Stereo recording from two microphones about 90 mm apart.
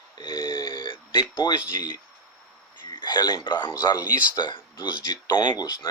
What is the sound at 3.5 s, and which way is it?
Speech, 55° left (ahead or behind).